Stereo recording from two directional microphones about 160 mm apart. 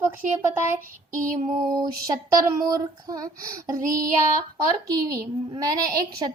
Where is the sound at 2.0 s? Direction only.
20° right (ahead or behind).